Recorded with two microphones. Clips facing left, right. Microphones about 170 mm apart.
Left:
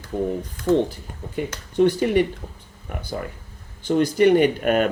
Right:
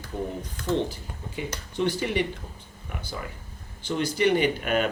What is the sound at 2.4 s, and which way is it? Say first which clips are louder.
Speech: left 4 dB; 60° left (ahead or behind).